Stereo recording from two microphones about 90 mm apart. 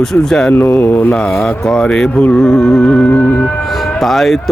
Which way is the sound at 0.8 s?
20° left (ahead or behind).